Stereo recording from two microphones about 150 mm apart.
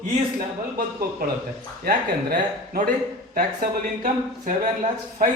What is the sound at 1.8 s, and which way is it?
Speech, 65° right (ahead or behind).